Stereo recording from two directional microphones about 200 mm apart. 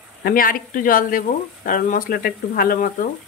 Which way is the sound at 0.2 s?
45° left (ahead or behind).